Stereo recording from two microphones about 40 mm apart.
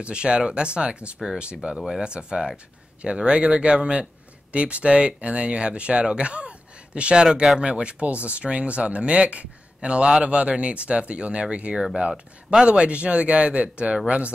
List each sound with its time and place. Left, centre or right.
0.0 s speech: right